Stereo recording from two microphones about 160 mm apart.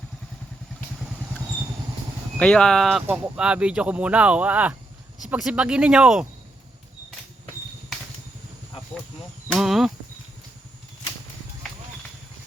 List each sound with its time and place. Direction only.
2.4 s speech: 5° left (ahead or behind)
7.9 s vehicle: centre (ahead or behind)
9.5 s speech: centre (ahead or behind)